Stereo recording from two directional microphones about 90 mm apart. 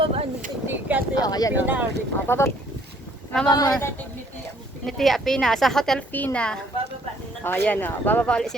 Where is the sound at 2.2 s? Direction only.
25° left (ahead or behind).